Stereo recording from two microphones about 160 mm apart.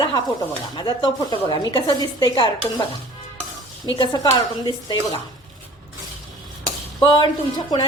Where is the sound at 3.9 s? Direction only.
25° left (ahead or behind).